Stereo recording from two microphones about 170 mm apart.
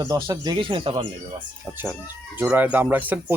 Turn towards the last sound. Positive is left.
turn(degrees=-10)  # may be behind; listen again after turning